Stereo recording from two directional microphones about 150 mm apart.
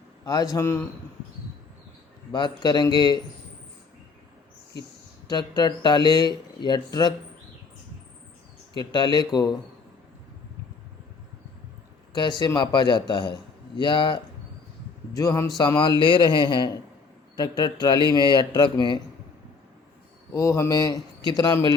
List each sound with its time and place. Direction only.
0.3 s speech: 25° left (ahead or behind)
2.3 s speech: 30° left (ahead or behind)
5.3 s speech: 30° left (ahead or behind)
8.8 s speech: 30° left (ahead or behind)
12.1 s a man's voice: 30° left (ahead or behind)
20.3 s speech: 20° left (ahead or behind)